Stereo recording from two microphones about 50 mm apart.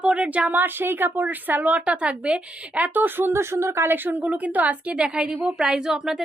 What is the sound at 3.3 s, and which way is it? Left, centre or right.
A woman's voice, right.